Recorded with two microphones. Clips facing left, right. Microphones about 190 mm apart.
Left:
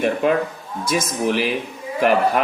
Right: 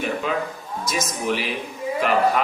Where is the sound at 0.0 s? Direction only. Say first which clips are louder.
Left 6 dB; 55° left (ahead or behind).